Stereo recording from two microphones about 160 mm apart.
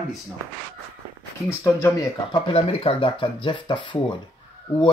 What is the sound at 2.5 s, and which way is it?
Speech, 35° left (ahead or behind).